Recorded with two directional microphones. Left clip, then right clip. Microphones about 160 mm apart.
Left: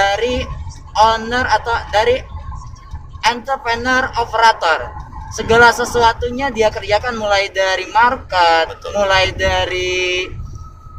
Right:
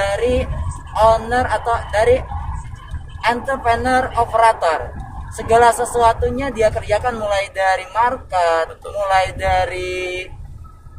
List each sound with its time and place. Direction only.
0.0 s music: 40° left (ahead or behind)
0.9 s a man's voice: 35° left (ahead or behind)